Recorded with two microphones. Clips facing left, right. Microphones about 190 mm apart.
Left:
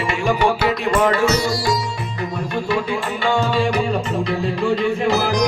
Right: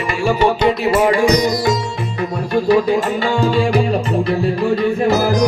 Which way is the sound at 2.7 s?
40° right (ahead or behind).